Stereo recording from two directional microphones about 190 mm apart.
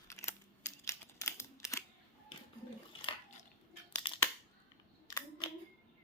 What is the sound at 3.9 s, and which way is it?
Scissors, 30° left (ahead or behind).